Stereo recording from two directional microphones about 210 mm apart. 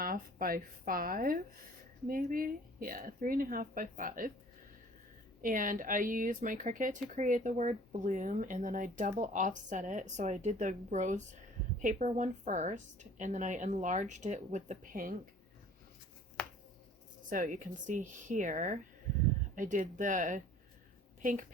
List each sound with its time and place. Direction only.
0.0 s a woman's voice: 45° right (ahead or behind)
5.4 s speech: 40° right (ahead or behind)
16.4 s a sound: 5° left (ahead or behind)
17.2 s a woman's voice: 40° right (ahead or behind)